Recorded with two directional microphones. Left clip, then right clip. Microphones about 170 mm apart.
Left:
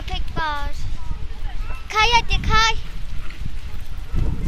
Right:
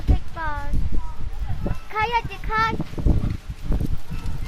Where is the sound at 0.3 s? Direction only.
10° left (ahead or behind).